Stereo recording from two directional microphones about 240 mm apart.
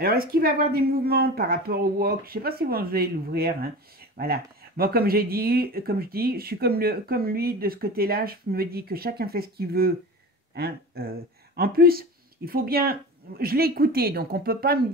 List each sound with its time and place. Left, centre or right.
0.0 s speech: right